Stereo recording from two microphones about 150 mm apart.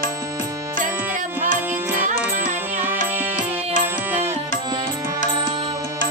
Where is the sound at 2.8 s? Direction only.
10° right (ahead or behind).